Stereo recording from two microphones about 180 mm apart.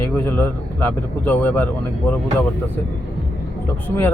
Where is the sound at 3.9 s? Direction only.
10° left (ahead or behind).